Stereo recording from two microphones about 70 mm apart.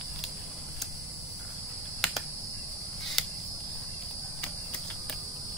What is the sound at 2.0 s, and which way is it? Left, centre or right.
Cricket, centre.